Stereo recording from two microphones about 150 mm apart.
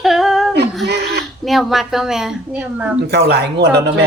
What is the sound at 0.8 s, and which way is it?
Speech, 90° right.